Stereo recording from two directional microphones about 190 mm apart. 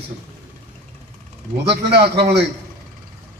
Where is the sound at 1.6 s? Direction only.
60° right (ahead or behind).